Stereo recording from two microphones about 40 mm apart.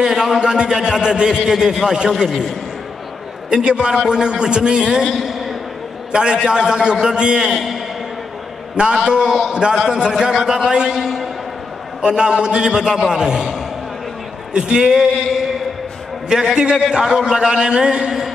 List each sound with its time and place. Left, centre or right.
0.0 s a man's voice: centre
3.4 s a man's voice: right
5.1 s a sound: centre
6.1 s a man's voice: right
7.4 s a man's voice: centre
8.9 s a man's voice: centre
11.0 s a man's voice: centre
12.0 s a man's voice: right
14.5 s a man's voice: right